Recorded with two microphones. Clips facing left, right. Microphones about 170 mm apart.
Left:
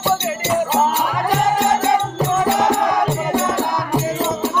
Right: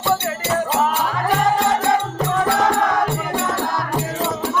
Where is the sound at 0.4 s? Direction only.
20° left (ahead or behind).